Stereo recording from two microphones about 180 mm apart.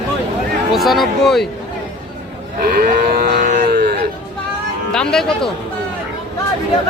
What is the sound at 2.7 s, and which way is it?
Livestock, 60° right (ahead or behind).